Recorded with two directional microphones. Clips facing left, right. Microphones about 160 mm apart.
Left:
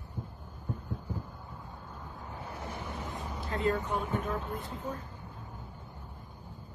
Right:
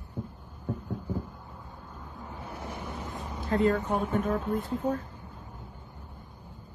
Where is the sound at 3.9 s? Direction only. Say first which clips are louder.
Right 5 dB; 50° right (ahead or behind).